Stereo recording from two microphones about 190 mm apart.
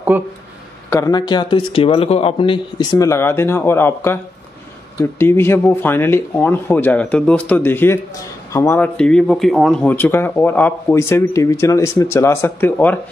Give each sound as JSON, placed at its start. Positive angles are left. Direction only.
{"t": 0.1, "sound": "speech", "side_deg": -10}
{"t": 0.8, "sound": "a man's voice", "side_deg": 15}
{"t": 5.2, "sound": "speech", "side_deg": 10}